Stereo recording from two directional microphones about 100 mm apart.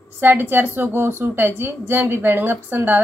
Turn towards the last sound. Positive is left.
turn(degrees=-20)  # may be behind; listen again after turning